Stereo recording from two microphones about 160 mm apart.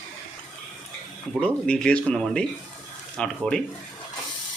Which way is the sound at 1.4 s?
5° left (ahead or behind).